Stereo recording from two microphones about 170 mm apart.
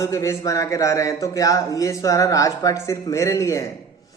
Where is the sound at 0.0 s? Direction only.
20° left (ahead or behind).